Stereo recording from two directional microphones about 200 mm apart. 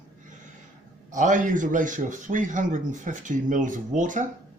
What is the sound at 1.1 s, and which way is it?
Speech, 40° right (ahead or behind).